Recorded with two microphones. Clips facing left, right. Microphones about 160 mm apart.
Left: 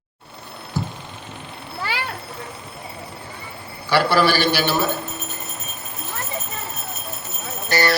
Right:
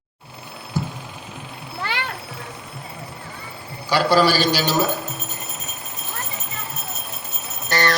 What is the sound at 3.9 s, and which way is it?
A man's voice, 15° right (ahead or behind).